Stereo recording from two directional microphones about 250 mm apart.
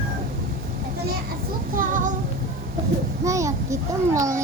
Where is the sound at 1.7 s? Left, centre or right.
Right.